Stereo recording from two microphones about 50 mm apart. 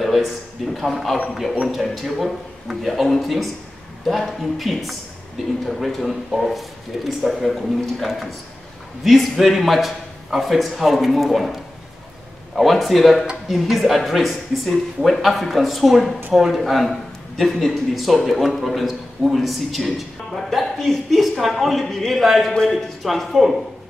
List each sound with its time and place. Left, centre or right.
0.0 s a sound: centre
0.7 s a man's voice: centre
12.5 s a man's voice: centre